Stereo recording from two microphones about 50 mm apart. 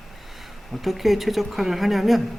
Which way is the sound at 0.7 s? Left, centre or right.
Centre.